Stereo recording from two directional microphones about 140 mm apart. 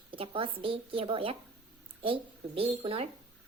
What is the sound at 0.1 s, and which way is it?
A woman's voice, 40° right (ahead or behind).